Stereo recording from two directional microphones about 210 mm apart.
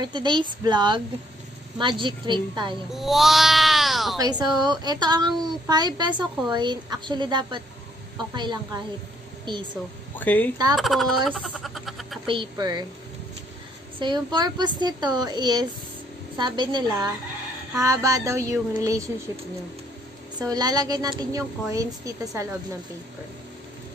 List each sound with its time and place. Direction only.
0.0 s speech: 20° right (ahead or behind)
2.9 s speech: centre (ahead or behind)
4.2 s speech: 20° right (ahead or behind)
10.1 s speech: 10° left (ahead or behind)
12.3 s speech: 20° right (ahead or behind)
13.9 s a woman's voice: 20° right (ahead or behind)
20.3 s a woman's voice: 20° right (ahead or behind)